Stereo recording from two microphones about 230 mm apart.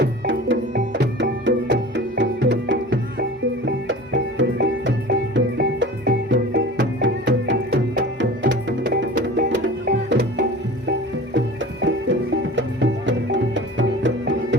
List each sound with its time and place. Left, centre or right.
0.0 s music: right